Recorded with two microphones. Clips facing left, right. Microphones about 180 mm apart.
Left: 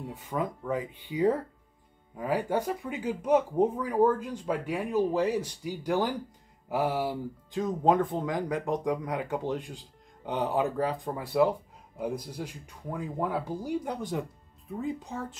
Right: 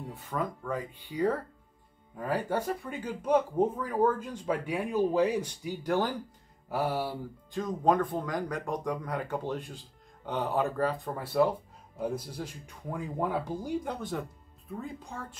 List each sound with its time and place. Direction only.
0.1 s speech: 15° left (ahead or behind)